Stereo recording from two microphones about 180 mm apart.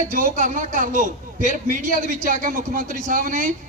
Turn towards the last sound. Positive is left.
turn(degrees=-45)  # may be behind; listen again after turning